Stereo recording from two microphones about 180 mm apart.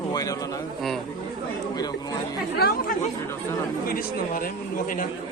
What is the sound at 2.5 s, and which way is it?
Speech, 60° left (ahead or behind).